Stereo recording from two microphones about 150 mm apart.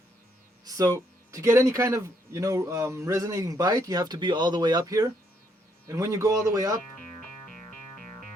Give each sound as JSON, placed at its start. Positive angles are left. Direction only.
{"t": 0.6, "sound": "speech", "side_deg": -25}